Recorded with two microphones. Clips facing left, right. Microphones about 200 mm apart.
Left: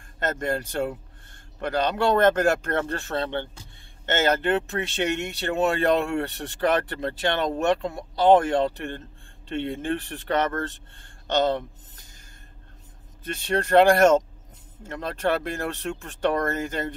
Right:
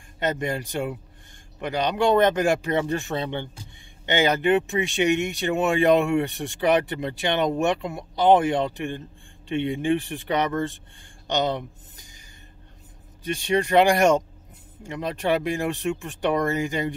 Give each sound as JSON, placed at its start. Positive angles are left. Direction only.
{"t": 0.2, "sound": "speech", "side_deg": -15}
{"t": 13.2, "sound": "speech", "side_deg": -10}